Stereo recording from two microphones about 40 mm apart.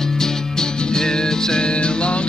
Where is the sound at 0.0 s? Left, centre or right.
Centre.